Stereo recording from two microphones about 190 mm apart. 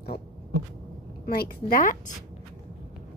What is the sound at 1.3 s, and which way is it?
Speech, 50° left (ahead or behind).